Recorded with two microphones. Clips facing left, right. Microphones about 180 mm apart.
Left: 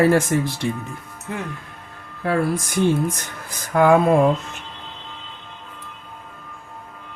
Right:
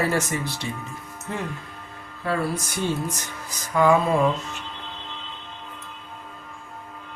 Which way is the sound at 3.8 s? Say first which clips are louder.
Left 4 dB; 55° left (ahead or behind).